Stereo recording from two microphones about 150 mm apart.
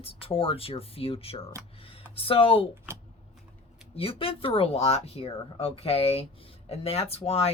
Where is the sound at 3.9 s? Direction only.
40° left (ahead or behind).